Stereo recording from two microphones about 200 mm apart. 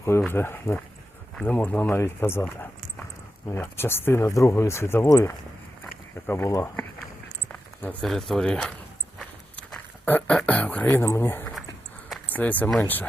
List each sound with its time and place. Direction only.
0.0 s speech: 10° left (ahead or behind)
9.1 s a sound: 5° left (ahead or behind)
12.0 s speech: 5° left (ahead or behind)